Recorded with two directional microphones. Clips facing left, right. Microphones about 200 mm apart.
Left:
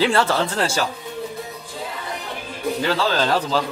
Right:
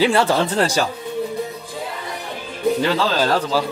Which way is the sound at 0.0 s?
15° right (ahead or behind).